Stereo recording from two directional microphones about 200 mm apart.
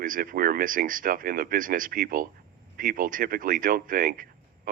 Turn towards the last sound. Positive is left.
turn(degrees=-45)  # may be behind; listen again after turning